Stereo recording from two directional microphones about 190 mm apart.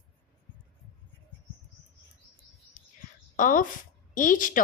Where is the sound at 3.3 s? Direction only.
45° left (ahead or behind).